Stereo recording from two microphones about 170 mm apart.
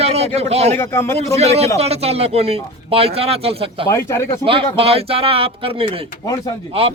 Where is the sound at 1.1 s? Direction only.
40° right (ahead or behind).